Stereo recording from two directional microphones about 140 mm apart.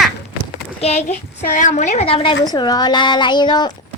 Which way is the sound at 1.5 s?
65° left (ahead or behind).